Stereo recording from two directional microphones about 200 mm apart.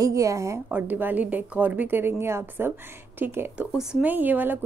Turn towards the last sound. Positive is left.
turn(degrees=-10)  # may be behind; listen again after turning